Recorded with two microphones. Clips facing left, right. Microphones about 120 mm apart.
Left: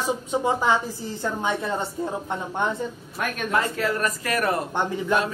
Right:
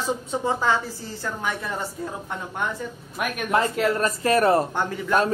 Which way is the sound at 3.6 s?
30° right (ahead or behind).